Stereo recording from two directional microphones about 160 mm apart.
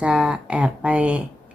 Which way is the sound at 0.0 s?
5° right (ahead or behind).